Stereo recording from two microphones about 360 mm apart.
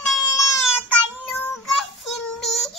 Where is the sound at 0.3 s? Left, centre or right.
Left.